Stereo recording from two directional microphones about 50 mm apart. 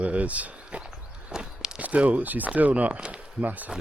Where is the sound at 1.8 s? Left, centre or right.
Right.